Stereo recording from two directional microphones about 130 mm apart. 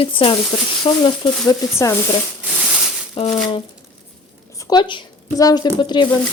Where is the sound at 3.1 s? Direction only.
45° left (ahead or behind).